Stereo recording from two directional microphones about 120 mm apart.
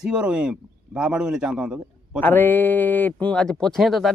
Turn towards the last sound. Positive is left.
turn(degrees=0)  # may be behind; listen again after turning